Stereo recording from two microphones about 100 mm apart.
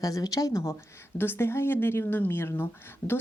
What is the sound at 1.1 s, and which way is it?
Speech, 20° left (ahead or behind).